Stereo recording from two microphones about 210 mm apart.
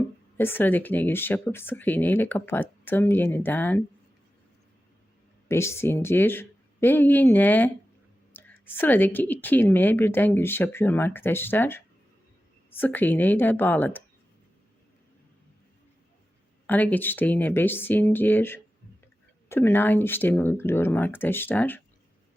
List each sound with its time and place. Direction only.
0.3 s a woman's voice: 10° left (ahead or behind)
5.5 s a woman's voice: 10° left (ahead or behind)
16.6 s a woman's voice: 10° left (ahead or behind)